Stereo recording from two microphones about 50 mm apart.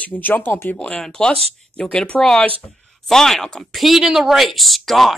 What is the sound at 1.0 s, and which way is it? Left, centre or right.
Speech, centre.